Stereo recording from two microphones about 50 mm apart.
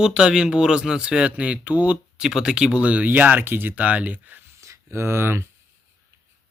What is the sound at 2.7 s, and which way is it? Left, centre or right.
Speech, right.